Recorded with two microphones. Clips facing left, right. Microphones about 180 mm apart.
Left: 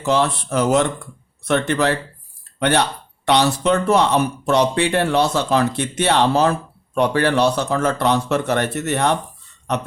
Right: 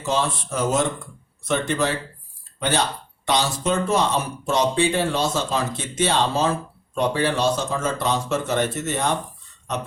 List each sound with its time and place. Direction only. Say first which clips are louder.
0.0 s speech: left 5 dB; 65° left (ahead or behind)